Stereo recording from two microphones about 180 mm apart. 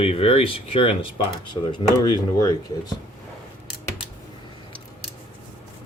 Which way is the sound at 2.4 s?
20° left (ahead or behind).